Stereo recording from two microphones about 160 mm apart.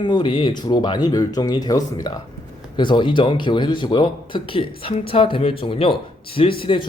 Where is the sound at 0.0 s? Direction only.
30° left (ahead or behind).